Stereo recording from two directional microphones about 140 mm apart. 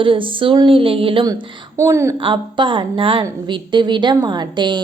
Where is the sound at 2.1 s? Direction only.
35° right (ahead or behind).